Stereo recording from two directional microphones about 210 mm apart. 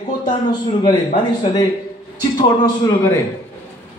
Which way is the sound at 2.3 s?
20° left (ahead or behind).